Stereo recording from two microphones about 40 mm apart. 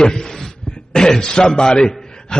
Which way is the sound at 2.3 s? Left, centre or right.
Centre.